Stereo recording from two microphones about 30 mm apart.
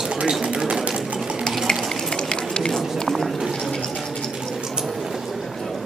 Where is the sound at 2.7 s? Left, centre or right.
Centre.